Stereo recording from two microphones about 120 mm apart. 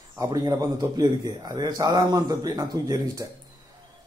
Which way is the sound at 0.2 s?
30° right (ahead or behind).